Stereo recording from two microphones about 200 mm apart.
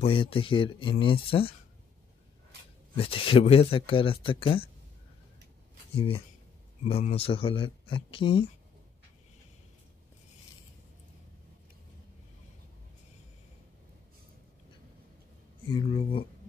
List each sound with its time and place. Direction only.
0.0 s speech: 25° left (ahead or behind)
3.0 s speech: 25° left (ahead or behind)
5.9 s speech: 25° left (ahead or behind)
15.7 s speech: 25° left (ahead or behind)